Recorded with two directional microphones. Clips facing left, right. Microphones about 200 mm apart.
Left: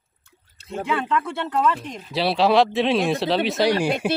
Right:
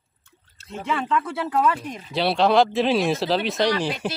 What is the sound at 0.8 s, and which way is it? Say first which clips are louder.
Speech: even; centre (ahead or behind).